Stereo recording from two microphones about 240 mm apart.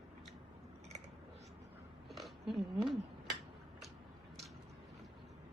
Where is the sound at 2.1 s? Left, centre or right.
Centre.